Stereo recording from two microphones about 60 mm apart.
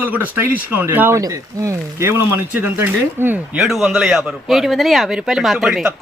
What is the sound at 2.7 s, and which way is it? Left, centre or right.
Speech, right.